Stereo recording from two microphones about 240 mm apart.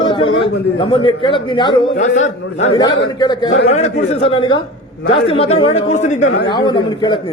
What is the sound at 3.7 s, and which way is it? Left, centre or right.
A man's voice, left.